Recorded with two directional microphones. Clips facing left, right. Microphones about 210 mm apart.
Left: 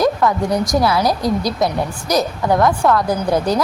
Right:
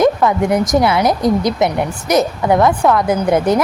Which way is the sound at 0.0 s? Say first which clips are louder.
Right 3 dB; 20° right (ahead or behind).